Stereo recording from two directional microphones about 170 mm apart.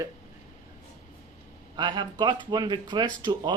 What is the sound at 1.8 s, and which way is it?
Speech, 25° right (ahead or behind).